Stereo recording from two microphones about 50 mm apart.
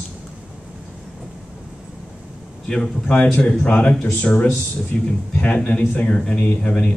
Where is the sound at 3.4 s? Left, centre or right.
Left.